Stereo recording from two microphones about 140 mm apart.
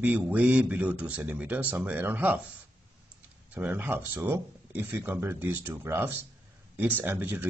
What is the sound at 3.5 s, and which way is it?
Speech, 10° right (ahead or behind).